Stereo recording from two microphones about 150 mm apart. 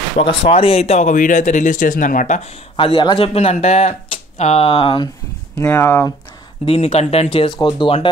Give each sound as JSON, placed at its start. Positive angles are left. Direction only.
{"t": 0.3, "sound": "speech", "side_deg": 40}
{"t": 2.7, "sound": "speech", "side_deg": 35}
{"t": 5.6, "sound": "speech", "side_deg": 15}
{"t": 6.6, "sound": "speech", "side_deg": 40}
{"t": 7.3, "sound": "speech", "side_deg": 30}